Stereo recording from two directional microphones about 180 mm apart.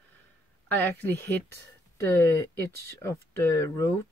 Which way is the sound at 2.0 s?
15° left (ahead or behind).